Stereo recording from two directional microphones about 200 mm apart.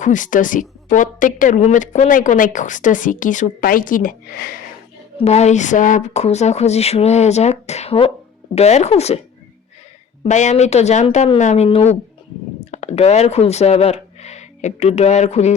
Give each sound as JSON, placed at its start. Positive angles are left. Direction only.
{"t": 0.0, "sound": "a woman's voice", "side_deg": 40}
{"t": 5.1, "sound": "a woman's voice", "side_deg": 30}
{"t": 10.2, "sound": "a woman's voice", "side_deg": 35}